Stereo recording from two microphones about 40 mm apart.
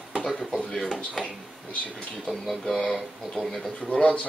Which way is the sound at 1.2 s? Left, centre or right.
Left.